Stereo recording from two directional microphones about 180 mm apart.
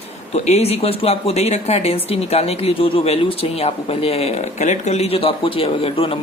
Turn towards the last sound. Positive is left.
turn(degrees=30)  # may be behind; listen again after turning